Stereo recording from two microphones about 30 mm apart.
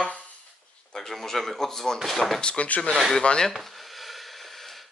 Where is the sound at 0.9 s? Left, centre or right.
Centre.